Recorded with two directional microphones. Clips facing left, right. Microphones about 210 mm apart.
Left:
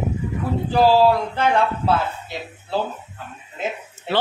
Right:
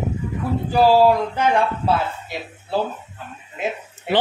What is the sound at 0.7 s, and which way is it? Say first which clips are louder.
Speech: right 1 dB; 15° right (ahead or behind).